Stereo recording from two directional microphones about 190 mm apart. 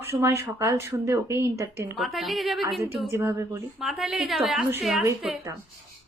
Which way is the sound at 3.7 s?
Centre (ahead or behind).